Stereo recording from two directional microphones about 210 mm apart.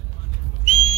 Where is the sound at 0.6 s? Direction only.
90° left.